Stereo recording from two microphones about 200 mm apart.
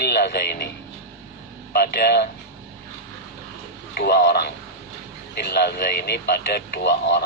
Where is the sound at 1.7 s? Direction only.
55° left (ahead or behind).